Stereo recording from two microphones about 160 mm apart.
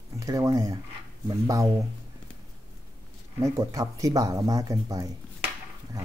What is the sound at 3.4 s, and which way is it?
Speech, 20° right (ahead or behind).